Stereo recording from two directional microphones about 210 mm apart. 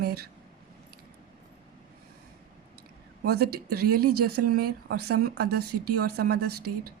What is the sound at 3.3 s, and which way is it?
Speech, 50° right (ahead or behind).